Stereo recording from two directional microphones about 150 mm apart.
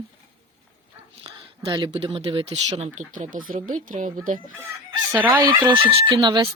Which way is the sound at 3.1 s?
65° right (ahead or behind).